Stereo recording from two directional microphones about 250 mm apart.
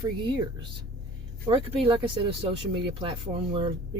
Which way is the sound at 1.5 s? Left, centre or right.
Centre.